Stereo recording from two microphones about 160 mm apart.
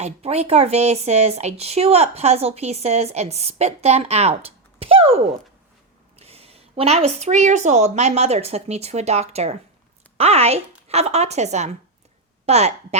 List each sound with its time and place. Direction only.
0.0 s speech: 40° right (ahead or behind)